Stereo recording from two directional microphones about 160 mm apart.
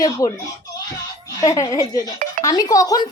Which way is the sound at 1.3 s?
20° left (ahead or behind).